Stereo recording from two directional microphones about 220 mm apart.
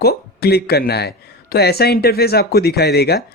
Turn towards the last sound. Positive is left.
turn(degrees=45)  # may be behind; listen again after turning